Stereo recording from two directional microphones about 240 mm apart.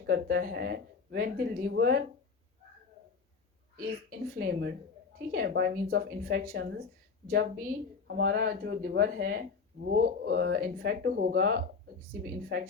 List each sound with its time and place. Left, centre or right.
0.0 s speech: right
4.2 s speech: right